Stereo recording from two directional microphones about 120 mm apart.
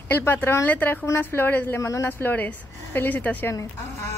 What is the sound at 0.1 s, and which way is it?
Speech, 15° left (ahead or behind).